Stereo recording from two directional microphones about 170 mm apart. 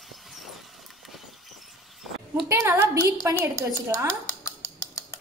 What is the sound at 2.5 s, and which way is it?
Speech, 15° right (ahead or behind).